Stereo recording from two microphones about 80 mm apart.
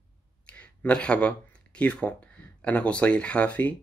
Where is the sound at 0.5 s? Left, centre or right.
Centre.